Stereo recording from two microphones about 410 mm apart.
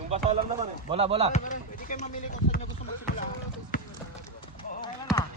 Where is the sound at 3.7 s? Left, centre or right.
Centre.